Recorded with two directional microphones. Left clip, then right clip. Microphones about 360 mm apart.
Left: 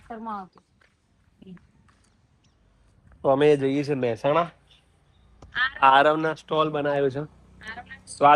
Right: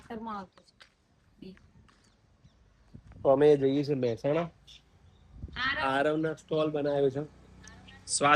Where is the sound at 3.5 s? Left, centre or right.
Left.